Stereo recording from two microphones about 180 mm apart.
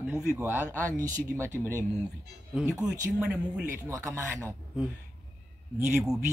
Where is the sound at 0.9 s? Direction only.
45° right (ahead or behind).